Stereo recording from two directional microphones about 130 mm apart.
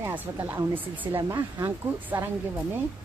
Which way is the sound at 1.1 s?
30° right (ahead or behind).